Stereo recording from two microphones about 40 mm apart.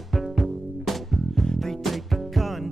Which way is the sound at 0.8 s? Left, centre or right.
Centre.